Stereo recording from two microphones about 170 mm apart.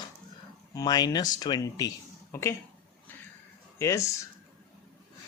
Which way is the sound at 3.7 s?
15° left (ahead or behind).